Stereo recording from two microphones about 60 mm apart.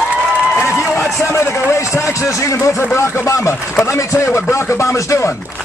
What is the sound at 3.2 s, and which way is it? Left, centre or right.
Speech, left.